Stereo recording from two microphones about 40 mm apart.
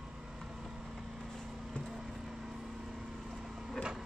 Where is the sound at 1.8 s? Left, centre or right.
Centre.